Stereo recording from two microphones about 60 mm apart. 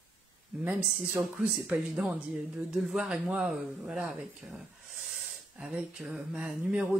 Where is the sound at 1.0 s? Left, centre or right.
Right.